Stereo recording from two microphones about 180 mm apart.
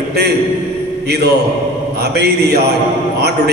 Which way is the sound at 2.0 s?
65° right (ahead or behind).